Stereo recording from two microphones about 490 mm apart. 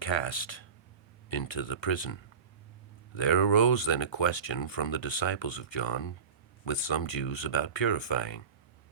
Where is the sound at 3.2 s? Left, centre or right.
Left.